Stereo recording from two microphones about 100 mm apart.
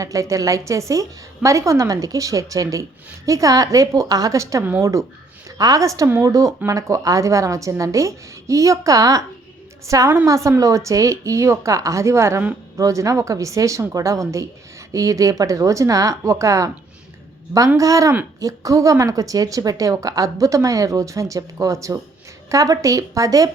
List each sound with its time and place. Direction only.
0.0 s a woman's voice: 35° right (ahead or behind)
17.7 s a woman's voice: 35° right (ahead or behind)